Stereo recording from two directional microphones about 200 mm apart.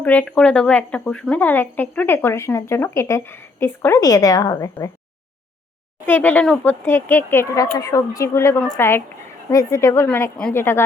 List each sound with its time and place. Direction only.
0.0 s speech: 10° left (ahead or behind)
6.1 s speech: 10° left (ahead or behind)